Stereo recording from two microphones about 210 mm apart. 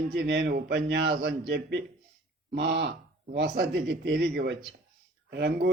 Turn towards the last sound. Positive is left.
turn(degrees=-50)  # may be behind; listen again after turning